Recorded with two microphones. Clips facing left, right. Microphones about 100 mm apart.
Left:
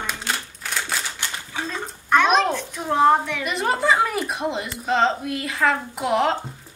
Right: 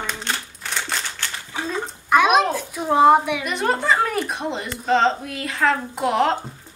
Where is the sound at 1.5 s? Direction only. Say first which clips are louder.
Right 5 dB; 5° right (ahead or behind).